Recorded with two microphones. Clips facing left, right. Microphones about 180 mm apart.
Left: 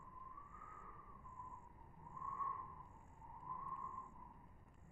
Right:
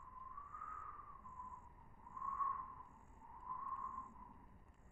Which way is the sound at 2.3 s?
20° left (ahead or behind).